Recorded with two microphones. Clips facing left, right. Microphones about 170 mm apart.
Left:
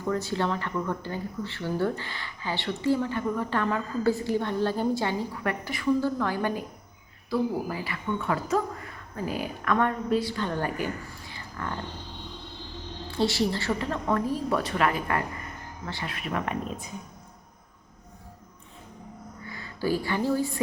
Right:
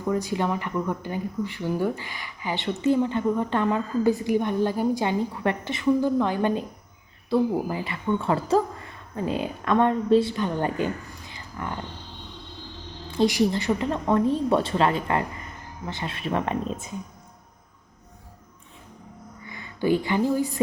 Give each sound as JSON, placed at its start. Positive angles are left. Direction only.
{"t": 0.0, "sound": "speech", "side_deg": -15}
{"t": 13.1, "sound": "speech", "side_deg": -15}
{"t": 19.5, "sound": "speech", "side_deg": -20}